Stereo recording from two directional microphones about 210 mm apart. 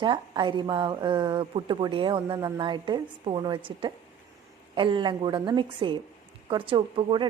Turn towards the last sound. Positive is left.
turn(degrees=-20)  # may be behind; listen again after turning